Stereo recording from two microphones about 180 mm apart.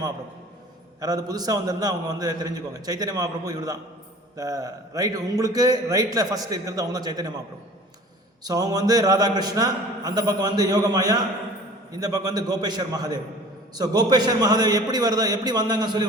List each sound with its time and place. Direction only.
1.0 s a man's voice: 20° right (ahead or behind)
8.4 s a man's voice: 20° right (ahead or behind)